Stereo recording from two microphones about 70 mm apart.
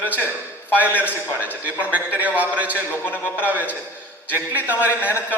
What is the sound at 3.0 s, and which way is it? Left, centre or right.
Speech, left.